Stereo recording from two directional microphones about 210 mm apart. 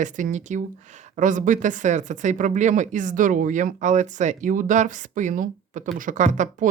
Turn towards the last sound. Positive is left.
turn(degrees=-35)  # may be behind; listen again after turning